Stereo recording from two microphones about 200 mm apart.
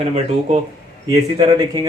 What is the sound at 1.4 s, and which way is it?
Speech, 20° right (ahead or behind).